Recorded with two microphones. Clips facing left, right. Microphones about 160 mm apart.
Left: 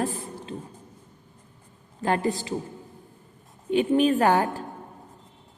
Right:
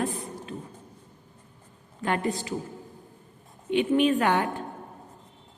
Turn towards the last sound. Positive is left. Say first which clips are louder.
# left 3 dB
turn(degrees=40)  # may be behind; listen again after turning